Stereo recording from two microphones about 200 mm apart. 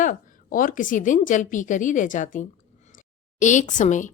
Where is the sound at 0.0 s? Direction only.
40° left (ahead or behind).